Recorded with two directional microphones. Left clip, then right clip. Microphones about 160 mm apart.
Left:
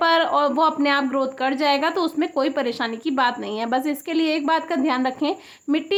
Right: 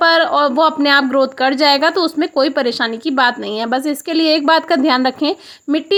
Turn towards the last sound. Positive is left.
turn(degrees=-35)  # may be behind; listen again after turning